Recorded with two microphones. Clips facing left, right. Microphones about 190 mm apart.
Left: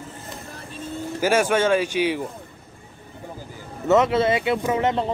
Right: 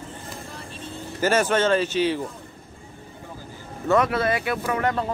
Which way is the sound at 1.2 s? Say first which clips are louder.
Left 1 dB; 10° left (ahead or behind).